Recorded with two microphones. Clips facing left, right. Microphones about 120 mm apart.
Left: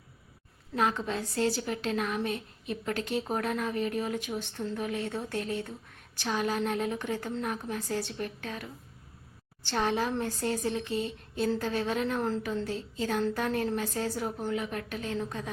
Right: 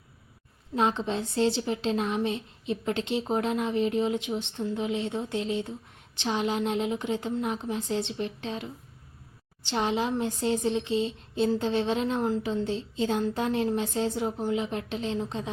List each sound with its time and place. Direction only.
0.8 s a woman's voice: 25° right (ahead or behind)